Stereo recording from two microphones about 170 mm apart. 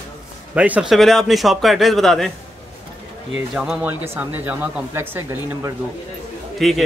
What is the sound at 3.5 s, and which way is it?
A man's voice, 5° right (ahead or behind).